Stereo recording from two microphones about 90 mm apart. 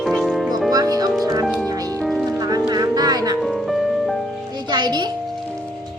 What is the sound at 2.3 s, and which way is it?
Music, 45° right (ahead or behind).